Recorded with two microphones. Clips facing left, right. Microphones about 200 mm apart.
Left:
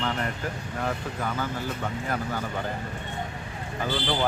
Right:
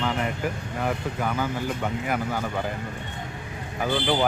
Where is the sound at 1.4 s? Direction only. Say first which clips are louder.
Right 3 dB; 10° right (ahead or behind).